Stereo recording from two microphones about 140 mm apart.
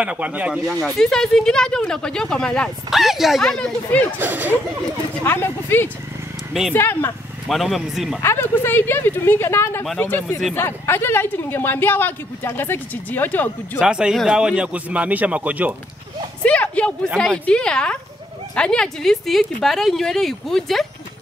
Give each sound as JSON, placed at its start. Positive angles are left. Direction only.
{"t": 0.0, "sound": "a man's voice", "side_deg": -10}
{"t": 0.8, "sound": "speech", "side_deg": 5}
{"t": 4.2, "sound": "a man's voice", "side_deg": -15}
{"t": 5.2, "sound": "speech", "side_deg": 15}
{"t": 7.4, "sound": "speech", "side_deg": 0}
{"t": 8.2, "sound": "speech", "side_deg": 15}
{"t": 13.7, "sound": "a man's voice", "side_deg": -5}
{"t": 16.4, "sound": "speech", "side_deg": 10}